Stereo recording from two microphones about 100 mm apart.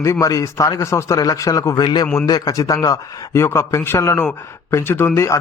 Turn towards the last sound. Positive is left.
turn(degrees=30)  # may be behind; listen again after turning